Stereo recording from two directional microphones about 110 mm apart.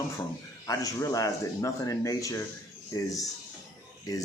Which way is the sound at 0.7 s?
30° left (ahead or behind).